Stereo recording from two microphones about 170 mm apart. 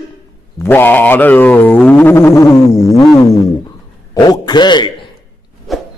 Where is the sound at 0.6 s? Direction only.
10° left (ahead or behind).